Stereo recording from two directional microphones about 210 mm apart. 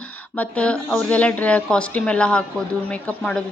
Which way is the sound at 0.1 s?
5° left (ahead or behind).